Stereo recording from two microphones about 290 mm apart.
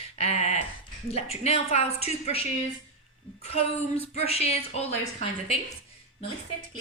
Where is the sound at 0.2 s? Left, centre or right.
Left.